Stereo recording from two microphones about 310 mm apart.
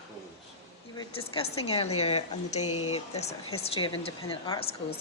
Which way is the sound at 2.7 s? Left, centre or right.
Left.